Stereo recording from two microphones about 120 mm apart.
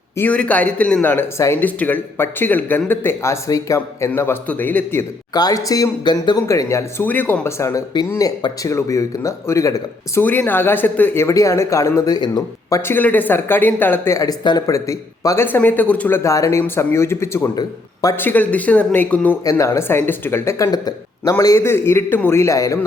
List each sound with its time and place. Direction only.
0.2 s speech: 10° left (ahead or behind)
5.3 s speech: 30° left (ahead or behind)
12.8 s speech: 15° left (ahead or behind)
15.4 s speech: 15° left (ahead or behind)
17.5 s speech: 30° left (ahead or behind)
18.2 s speech: 15° left (ahead or behind)
19.5 s speech: 25° left (ahead or behind)